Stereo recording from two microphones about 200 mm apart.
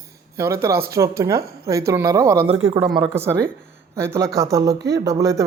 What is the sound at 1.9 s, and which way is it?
Speech, 15° right (ahead or behind).